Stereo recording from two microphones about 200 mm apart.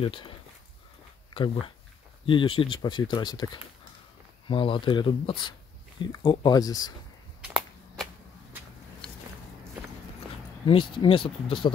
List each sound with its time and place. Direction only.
0.0 s speech: 25° left (ahead or behind)
10.7 s speech: 25° left (ahead or behind)